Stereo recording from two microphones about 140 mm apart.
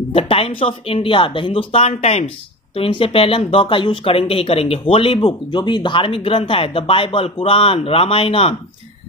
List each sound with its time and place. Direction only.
0.1 s speech: 45° left (ahead or behind)